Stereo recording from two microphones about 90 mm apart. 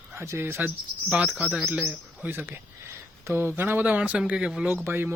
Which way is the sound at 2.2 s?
25° right (ahead or behind).